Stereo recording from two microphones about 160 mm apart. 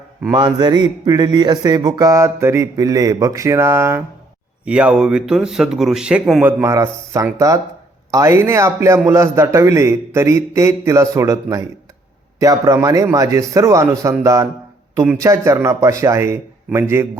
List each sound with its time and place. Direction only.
0.2 s speech: 25° right (ahead or behind); by 6.4 s 5° right (ahead or behind)
6.4 s a man's voice: 15° right (ahead or behind)